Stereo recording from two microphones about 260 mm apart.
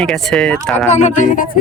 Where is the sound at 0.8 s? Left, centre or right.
Left.